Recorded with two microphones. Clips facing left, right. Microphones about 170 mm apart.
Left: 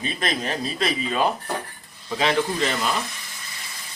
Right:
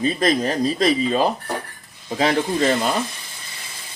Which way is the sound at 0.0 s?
40° right (ahead or behind).